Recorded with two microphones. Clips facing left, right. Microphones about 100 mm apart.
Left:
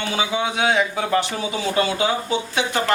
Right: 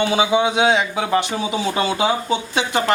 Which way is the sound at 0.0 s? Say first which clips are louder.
Right 6 dB; 20° right (ahead or behind).